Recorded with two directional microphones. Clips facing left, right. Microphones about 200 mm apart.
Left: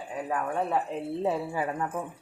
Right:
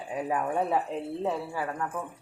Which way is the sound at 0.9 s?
5° left (ahead or behind).